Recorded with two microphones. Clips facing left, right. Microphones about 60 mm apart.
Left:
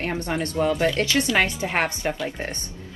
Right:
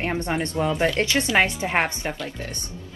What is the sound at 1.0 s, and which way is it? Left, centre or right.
Speech, right.